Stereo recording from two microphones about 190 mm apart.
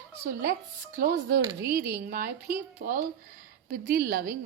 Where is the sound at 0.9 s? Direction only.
55° right (ahead or behind).